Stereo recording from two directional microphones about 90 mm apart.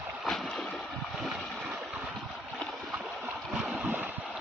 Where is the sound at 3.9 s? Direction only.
20° right (ahead or behind).